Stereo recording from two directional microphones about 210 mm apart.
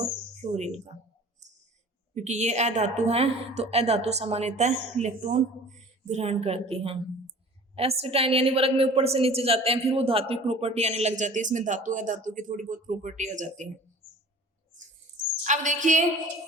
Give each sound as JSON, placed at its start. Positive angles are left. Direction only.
{"t": 0.4, "sound": "a woman's voice", "side_deg": -30}
{"t": 2.1, "sound": "a woman's voice", "side_deg": -35}
{"t": 15.4, "sound": "a woman's voice", "side_deg": -35}